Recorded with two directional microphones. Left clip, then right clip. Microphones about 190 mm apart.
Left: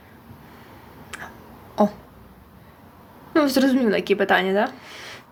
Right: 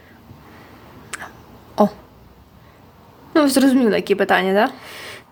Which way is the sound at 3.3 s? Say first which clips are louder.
Right 4 dB; 15° right (ahead or behind).